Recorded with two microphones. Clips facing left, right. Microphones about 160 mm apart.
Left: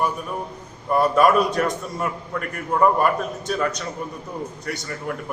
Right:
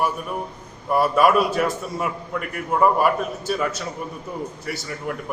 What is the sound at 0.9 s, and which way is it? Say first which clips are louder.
A man's voice: left 1 dB; 5° right (ahead or behind).